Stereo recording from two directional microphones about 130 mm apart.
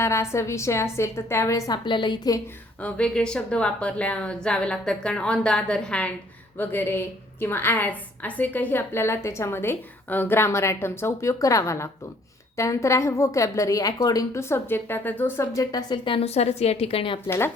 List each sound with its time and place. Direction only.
0.0 s a woman's voice: 20° left (ahead or behind)
2.8 s a woman's voice: 5° left (ahead or behind)
15.7 s a woman's voice: 35° left (ahead or behind)
17.2 s a woman's voice: 20° left (ahead or behind)